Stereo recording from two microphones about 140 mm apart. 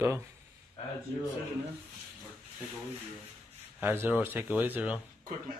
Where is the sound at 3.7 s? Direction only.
15° right (ahead or behind).